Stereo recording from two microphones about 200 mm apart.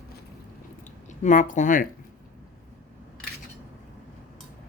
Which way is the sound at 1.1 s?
35° left (ahead or behind).